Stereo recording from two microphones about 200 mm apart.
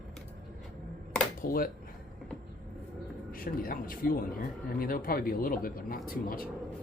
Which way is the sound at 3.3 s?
45° left (ahead or behind).